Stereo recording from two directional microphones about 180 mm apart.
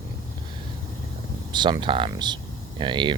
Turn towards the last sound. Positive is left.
turn(degrees=-25)  # may be behind; listen again after turning